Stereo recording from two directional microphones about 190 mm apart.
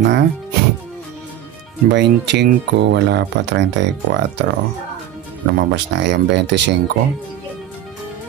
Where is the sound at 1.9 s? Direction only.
65° right (ahead or behind).